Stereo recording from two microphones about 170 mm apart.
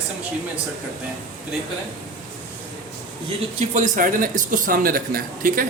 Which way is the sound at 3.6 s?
45° right (ahead or behind).